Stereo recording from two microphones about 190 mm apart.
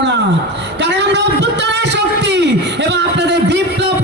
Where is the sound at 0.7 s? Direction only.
65° right (ahead or behind).